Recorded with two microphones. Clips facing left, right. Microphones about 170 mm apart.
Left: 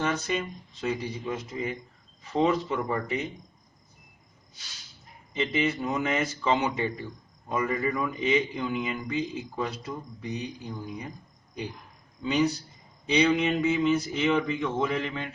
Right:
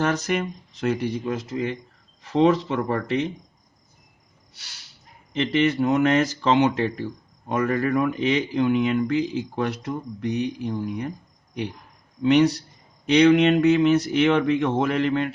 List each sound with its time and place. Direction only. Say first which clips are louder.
0.0 s speech: right 5 dB; 80° right
5.3 s speech: right 6 dB; 75° right (ahead or behind)
12.2 s speech: right 8 dB; 75° right (ahead or behind)